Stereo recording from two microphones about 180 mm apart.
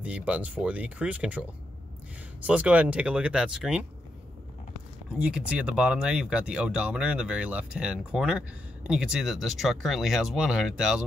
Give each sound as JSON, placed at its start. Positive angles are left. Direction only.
{"t": 0.0, "sound": "speech", "side_deg": -5}
{"t": 2.4, "sound": "speech", "side_deg": -5}
{"t": 5.2, "sound": "speech", "side_deg": -5}